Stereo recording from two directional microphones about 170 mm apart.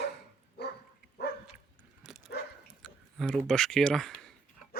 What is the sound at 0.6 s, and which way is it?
Bow-wow, 75° left (ahead or behind).